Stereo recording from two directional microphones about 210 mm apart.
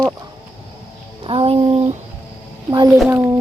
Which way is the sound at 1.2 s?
25° right (ahead or behind).